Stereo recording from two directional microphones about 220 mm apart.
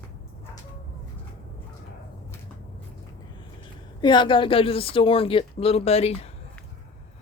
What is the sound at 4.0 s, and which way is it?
Speech, 20° left (ahead or behind).